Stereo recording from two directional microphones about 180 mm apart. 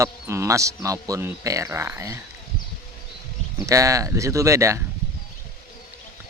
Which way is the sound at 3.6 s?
20° right (ahead or behind).